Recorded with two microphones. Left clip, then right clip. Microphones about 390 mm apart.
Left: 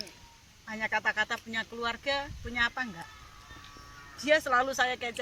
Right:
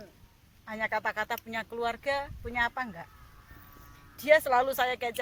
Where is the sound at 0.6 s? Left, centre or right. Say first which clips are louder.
Left 1 dB; centre.